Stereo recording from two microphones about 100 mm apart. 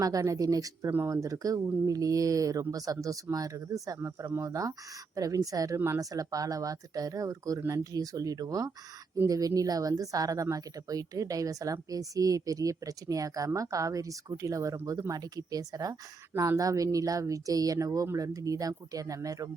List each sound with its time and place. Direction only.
0.0 s speech: 35° right (ahead or behind)
0.9 s speech: 25° right (ahead or behind)
1.1 s speech: 35° right (ahead or behind)